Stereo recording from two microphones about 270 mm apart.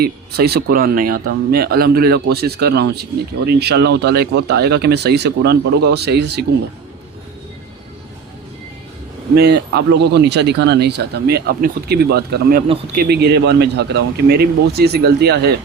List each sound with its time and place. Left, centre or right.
0.0 s speech: right
9.3 s speech: right